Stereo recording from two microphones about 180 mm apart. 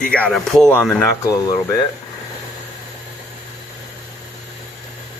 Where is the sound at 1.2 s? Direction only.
20° left (ahead or behind).